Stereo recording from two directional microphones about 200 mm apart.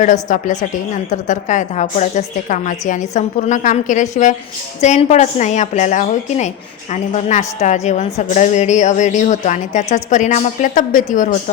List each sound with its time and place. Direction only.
0.0 s a woman's voice: 40° left (ahead or behind)